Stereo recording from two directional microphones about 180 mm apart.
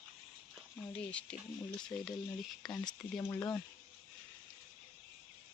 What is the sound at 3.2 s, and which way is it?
Speech, 15° left (ahead or behind).